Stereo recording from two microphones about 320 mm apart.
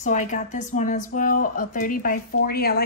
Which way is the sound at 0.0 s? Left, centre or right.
Left.